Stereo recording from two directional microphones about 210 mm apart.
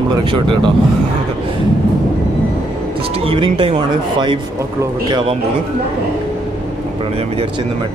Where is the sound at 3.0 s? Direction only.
25° right (ahead or behind).